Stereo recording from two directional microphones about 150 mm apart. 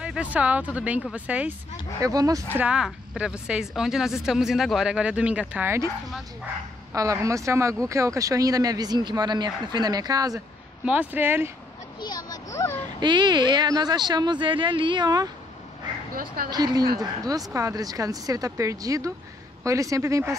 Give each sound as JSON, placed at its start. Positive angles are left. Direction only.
{"t": 0.0, "sound": "speech", "side_deg": -10}
{"t": 2.0, "sound": "speech", "side_deg": -25}
{"t": 2.5, "sound": "speech", "side_deg": -5}
{"t": 6.9, "sound": "speech", "side_deg": -20}
{"t": 10.9, "sound": "speech", "side_deg": -10}
{"t": 12.0, "sound": "speech", "side_deg": 25}
{"t": 13.0, "sound": "speech", "side_deg": -30}
{"t": 16.1, "sound": "speech", "side_deg": -75}
{"t": 16.4, "sound": "speech", "side_deg": -25}